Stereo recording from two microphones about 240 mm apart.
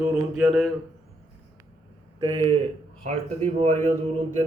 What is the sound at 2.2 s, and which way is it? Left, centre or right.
Speech, right.